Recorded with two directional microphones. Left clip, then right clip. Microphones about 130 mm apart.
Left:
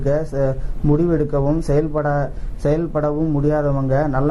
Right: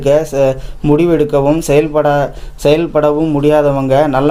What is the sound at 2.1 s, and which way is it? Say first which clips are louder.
Speech: right 9 dB; 25° right (ahead or behind).